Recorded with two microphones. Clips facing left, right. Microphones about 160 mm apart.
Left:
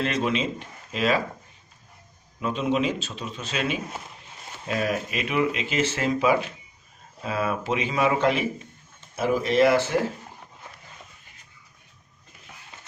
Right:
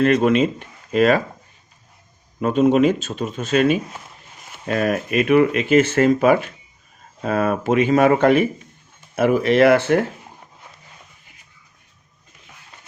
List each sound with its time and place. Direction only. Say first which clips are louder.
0.0 s speech: right 10 dB; 50° right (ahead or behind)
2.4 s speech: right 9 dB; 50° right (ahead or behind)
9.1 s speech: right 6 dB; 65° right (ahead or behind)